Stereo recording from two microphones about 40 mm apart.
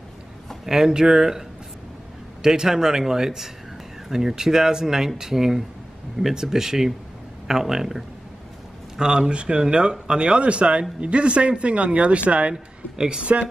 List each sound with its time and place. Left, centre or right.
0.7 s speech: centre
2.4 s speech: centre
12.9 s speech: centre
13.2 s speech: right